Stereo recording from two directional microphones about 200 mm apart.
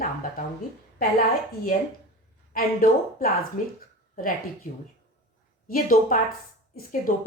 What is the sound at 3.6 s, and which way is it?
Speech, 40° left (ahead or behind).